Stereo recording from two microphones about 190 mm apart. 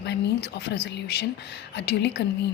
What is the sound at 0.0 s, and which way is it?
Speech, 60° left (ahead or behind).